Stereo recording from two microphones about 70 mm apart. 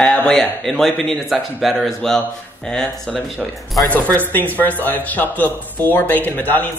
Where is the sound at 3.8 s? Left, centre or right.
Left.